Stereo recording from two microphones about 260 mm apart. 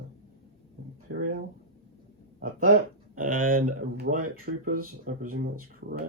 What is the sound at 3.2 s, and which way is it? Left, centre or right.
Speech, right.